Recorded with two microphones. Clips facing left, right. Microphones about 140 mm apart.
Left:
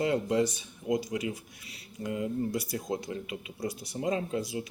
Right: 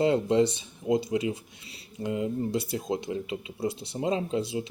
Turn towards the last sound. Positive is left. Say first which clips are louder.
# right 3 dB
turn(degrees=-25)  # may be behind; listen again after turning